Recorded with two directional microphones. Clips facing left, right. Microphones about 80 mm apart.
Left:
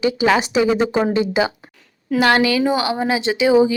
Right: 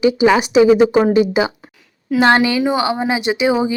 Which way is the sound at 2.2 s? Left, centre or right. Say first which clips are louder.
Right 2 dB; right.